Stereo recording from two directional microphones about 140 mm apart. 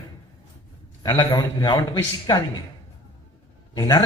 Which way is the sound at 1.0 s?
40° left (ahead or behind).